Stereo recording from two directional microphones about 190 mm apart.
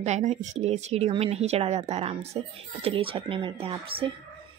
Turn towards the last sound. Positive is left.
turn(degrees=-30)  # may be behind; listen again after turning